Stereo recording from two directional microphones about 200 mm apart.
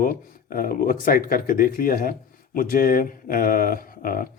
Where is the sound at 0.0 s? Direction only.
45° left (ahead or behind).